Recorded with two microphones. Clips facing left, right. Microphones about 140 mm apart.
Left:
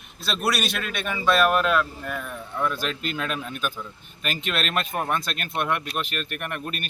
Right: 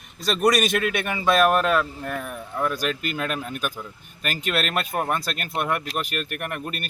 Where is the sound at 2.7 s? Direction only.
55° right (ahead or behind).